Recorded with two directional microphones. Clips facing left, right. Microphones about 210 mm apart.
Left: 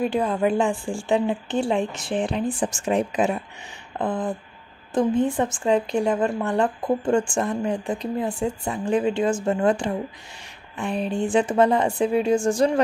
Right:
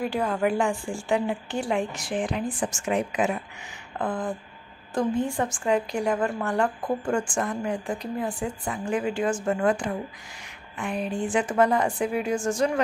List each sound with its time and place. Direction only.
0.0 s a woman's voice: 25° left (ahead or behind)
4.0 s a woman's voice: 20° left (ahead or behind)